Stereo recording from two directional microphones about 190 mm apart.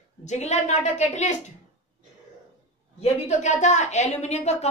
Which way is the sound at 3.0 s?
40° left (ahead or behind).